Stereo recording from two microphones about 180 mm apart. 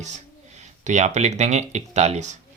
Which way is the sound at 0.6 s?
40° right (ahead or behind).